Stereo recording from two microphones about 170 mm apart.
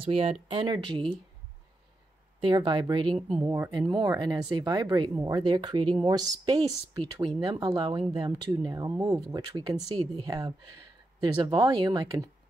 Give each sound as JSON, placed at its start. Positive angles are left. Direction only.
{"t": 0.0, "sound": "speech", "side_deg": -35}
{"t": 2.4, "sound": "speech", "side_deg": -25}
{"t": 3.3, "sound": "speech", "side_deg": -15}